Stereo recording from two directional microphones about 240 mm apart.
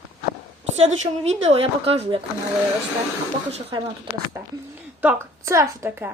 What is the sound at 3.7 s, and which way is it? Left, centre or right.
Speech, centre.